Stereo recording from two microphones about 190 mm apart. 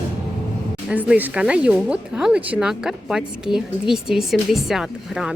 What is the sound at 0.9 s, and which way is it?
Speech, 5° right (ahead or behind).